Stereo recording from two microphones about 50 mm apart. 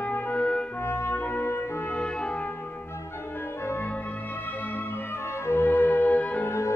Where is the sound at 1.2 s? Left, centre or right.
Left.